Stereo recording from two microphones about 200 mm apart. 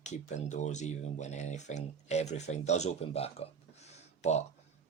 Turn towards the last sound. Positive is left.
turn(degrees=35)  # may be behind; listen again after turning